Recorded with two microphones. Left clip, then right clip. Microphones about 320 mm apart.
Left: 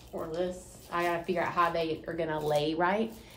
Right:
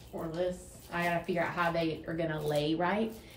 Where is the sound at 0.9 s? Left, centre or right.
Centre.